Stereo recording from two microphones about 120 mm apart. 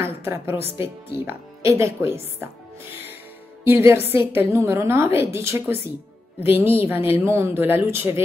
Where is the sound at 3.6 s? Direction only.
20° right (ahead or behind).